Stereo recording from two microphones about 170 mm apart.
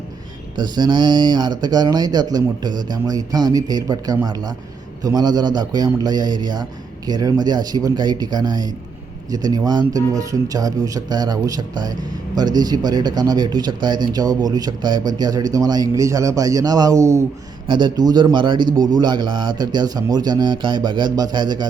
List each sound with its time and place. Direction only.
0.5 s speech: 25° right (ahead or behind)